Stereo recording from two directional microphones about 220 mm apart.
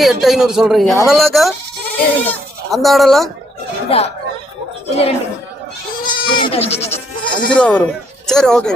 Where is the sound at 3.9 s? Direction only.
30° left (ahead or behind).